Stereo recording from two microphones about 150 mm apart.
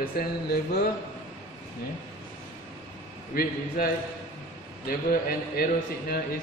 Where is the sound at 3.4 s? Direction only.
75° left (ahead or behind).